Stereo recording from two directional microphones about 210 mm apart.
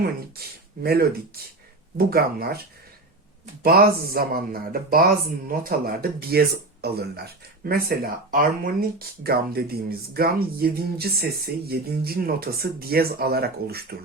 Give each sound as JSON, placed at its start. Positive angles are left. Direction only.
{"t": 0.0, "sound": "speech", "side_deg": -45}
{"t": 2.0, "sound": "speech", "side_deg": -45}
{"t": 3.6, "sound": "speech", "side_deg": -45}